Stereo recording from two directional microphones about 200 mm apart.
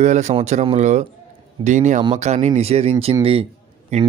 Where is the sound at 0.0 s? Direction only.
35° right (ahead or behind).